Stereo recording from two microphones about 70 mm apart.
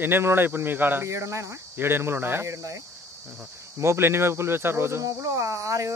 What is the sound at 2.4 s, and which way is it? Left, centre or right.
Speech, right.